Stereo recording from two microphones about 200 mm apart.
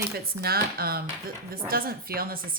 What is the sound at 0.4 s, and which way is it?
A woman's voice, 50° right (ahead or behind).